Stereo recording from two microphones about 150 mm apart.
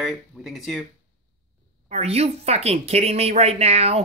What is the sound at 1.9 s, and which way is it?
Speech, 45° right (ahead or behind).